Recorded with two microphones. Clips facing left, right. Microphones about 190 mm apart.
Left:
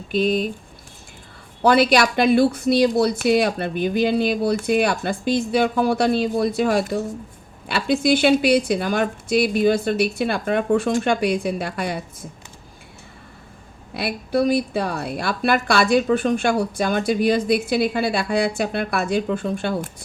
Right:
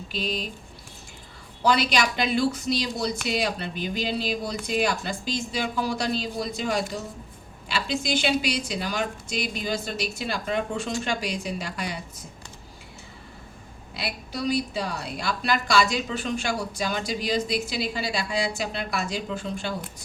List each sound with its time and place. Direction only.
0.1 s a sound: 55° left (ahead or behind)
1.6 s a woman's voice: 55° left (ahead or behind)
13.9 s a woman's voice: 55° left (ahead or behind)